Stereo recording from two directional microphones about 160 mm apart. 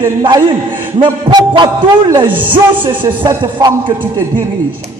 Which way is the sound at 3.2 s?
25° right (ahead or behind).